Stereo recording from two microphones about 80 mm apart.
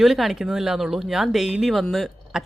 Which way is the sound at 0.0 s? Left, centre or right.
Centre.